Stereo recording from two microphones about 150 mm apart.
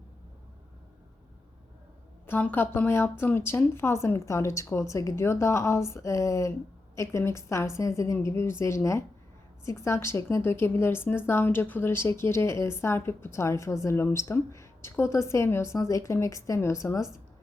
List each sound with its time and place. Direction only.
2.2 s a woman's voice: 15° left (ahead or behind)